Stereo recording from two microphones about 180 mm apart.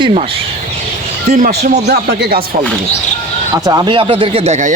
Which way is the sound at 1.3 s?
45° right (ahead or behind).